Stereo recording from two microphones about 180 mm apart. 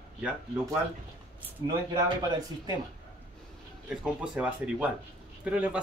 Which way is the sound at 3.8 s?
5° right (ahead or behind).